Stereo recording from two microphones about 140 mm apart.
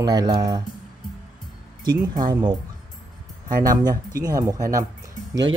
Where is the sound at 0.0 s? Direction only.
30° right (ahead or behind).